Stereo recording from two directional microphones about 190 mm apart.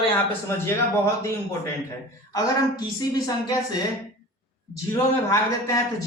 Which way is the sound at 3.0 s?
20° left (ahead or behind).